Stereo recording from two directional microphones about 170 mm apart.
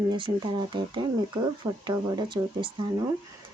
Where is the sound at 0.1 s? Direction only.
25° right (ahead or behind).